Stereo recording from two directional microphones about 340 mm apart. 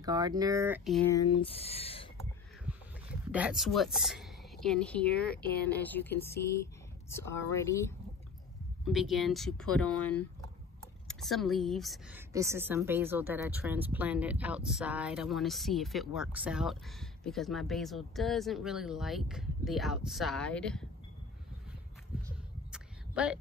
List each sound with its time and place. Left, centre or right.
0.0 s speech: centre
1.4 s speech: centre
3.1 s a woman's voice: centre
8.9 s a woman's voice: centre
22.7 s a sound: centre